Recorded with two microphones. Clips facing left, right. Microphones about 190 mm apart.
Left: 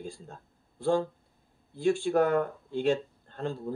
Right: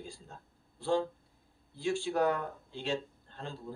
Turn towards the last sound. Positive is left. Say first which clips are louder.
# left 9 dB
turn(degrees=50)  # may be behind; listen again after turning